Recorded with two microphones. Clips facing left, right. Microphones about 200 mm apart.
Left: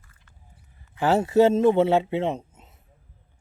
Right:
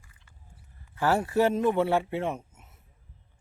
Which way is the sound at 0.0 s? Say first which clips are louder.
Left 1 dB; 15° right (ahead or behind).